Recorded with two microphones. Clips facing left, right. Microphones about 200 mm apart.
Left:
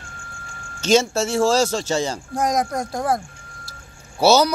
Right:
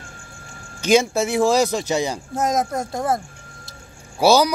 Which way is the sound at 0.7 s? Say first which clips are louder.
Right 1 dB; 15° right (ahead or behind).